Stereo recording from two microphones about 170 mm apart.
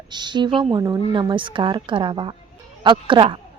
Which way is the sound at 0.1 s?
25° right (ahead or behind).